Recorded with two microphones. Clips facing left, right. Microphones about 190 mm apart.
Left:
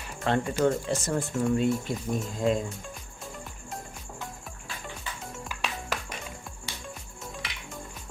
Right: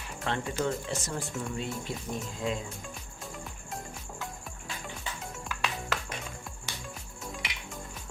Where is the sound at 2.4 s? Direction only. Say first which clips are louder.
Left 7 dB; 45° left (ahead or behind).